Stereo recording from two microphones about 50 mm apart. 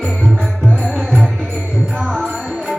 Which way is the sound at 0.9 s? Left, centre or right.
Centre.